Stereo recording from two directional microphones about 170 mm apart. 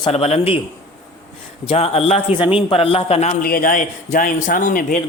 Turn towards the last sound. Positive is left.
turn(degrees=50)  # may be behind; listen again after turning